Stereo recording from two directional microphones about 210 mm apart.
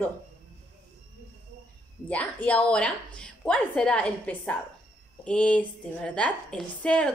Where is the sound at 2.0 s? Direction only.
5° left (ahead or behind).